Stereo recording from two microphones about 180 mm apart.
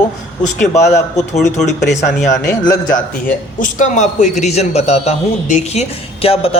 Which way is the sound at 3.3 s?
45° left (ahead or behind).